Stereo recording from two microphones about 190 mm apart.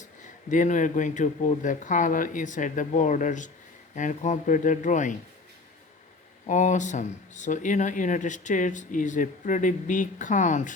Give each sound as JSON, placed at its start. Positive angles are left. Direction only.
{"t": 0.5, "sound": "speech", "side_deg": 40}
{"t": 6.4, "sound": "speech", "side_deg": 40}